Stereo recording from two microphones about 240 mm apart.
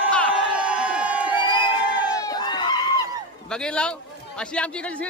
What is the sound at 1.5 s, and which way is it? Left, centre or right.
Crowd, centre.